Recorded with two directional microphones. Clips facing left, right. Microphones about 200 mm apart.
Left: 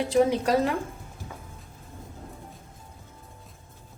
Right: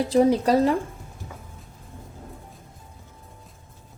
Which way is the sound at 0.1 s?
35° right (ahead or behind).